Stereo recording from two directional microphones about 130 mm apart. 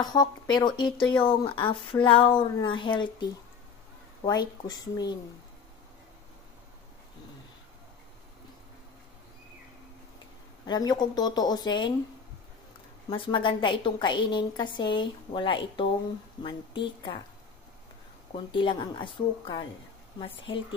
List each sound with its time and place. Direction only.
0.0 s a woman's voice: 30° left (ahead or behind)
10.6 s a woman's voice: 30° left (ahead or behind)
13.1 s a woman's voice: 40° left (ahead or behind)
18.3 s a woman's voice: 40° left (ahead or behind)